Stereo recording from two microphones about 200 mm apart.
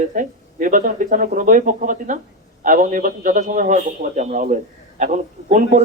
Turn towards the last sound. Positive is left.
turn(degrees=-40)  # may be behind; listen again after turning